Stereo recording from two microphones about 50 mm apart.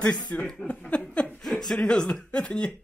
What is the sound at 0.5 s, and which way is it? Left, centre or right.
Speech, centre.